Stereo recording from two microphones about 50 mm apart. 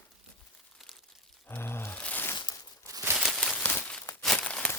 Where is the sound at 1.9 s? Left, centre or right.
Left.